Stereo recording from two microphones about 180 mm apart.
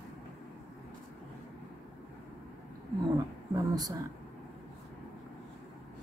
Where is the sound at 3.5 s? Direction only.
20° right (ahead or behind).